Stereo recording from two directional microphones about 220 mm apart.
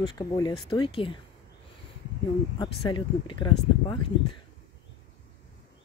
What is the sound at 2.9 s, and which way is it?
Speech, 20° left (ahead or behind).